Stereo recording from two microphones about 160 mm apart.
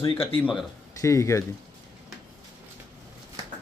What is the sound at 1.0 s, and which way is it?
Speech, 20° left (ahead or behind).